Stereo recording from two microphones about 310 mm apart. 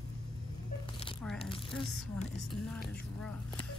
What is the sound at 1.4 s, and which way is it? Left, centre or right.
Speech, centre.